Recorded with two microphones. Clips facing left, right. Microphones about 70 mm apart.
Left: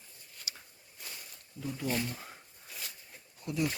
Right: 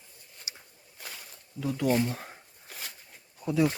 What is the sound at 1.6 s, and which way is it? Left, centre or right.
Speech, right.